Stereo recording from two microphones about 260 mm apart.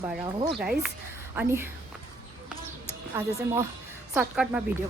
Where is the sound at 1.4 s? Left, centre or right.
Centre.